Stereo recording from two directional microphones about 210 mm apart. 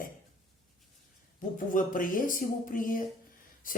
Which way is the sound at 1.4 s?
40° left (ahead or behind).